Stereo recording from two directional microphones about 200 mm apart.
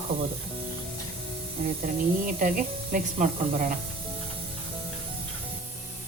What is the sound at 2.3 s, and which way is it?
Speech, 45° right (ahead or behind).